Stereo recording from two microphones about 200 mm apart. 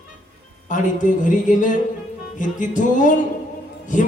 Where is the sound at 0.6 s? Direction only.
40° left (ahead or behind).